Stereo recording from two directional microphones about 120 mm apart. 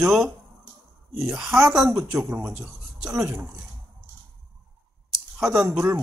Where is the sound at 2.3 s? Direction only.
10° right (ahead or behind).